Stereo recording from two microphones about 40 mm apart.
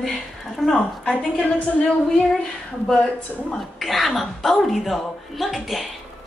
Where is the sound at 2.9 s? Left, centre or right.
Left.